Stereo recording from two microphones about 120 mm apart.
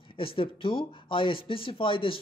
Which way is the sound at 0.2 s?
50° left (ahead or behind).